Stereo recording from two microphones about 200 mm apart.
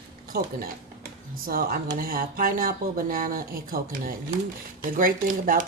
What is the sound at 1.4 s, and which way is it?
Speech, 45° right (ahead or behind).